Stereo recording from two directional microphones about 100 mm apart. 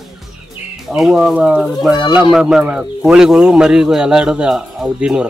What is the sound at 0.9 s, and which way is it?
A man's voice, 5° right (ahead or behind).